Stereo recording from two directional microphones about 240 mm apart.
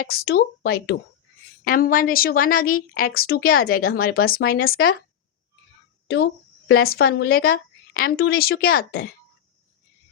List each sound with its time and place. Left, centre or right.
0.0 s a woman's voice: left
6.1 s a woman's voice: left